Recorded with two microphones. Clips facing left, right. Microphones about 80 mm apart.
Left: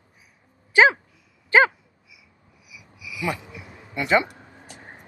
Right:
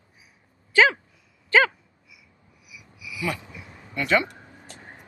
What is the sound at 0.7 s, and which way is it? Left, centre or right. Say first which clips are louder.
Speech: left 2 dB; left.